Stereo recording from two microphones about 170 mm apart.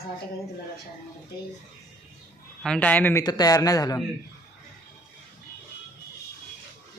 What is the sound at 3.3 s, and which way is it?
Speech, 20° left (ahead or behind).